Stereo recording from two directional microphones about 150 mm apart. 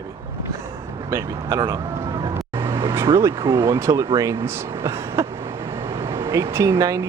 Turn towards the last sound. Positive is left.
turn(degrees=-20)  # may be behind; listen again after turning